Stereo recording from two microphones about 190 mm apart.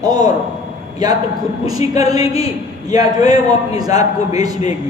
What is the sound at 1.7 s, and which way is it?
A man's voice, 20° right (ahead or behind).